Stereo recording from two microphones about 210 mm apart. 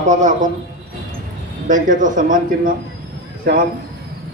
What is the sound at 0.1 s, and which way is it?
Speech, 35° right (ahead or behind).